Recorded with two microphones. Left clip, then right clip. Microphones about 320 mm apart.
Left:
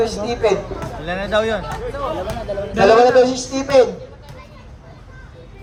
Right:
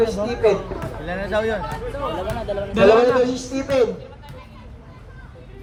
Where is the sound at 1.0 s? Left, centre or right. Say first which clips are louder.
Left 4 dB; left.